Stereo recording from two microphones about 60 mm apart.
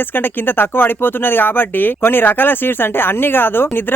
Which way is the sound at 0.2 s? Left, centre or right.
Left.